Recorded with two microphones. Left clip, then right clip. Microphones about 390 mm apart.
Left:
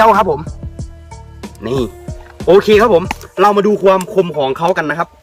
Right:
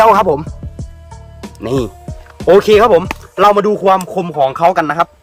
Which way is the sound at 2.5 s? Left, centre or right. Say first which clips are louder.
Right 1 dB; right.